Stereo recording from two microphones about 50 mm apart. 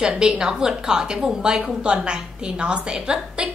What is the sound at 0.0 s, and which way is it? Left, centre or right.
A woman's voice, centre.